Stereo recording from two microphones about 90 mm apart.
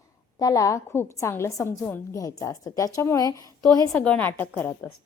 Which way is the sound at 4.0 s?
20° left (ahead or behind).